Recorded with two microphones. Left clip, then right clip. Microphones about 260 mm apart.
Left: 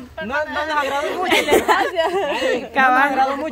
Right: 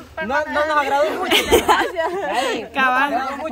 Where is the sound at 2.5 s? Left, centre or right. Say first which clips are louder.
Left 5 dB; centre.